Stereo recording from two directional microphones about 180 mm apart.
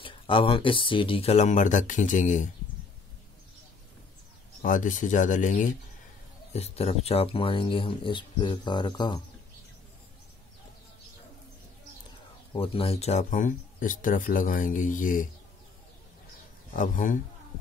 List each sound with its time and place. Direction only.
0.0 s speech: 30° left (ahead or behind)
4.6 s speech: 45° left (ahead or behind); by 9.2 s 25° left (ahead or behind)
12.5 s speech: 30° left (ahead or behind); by 15.2 s 45° left (ahead or behind)
16.7 s speech: 45° left (ahead or behind)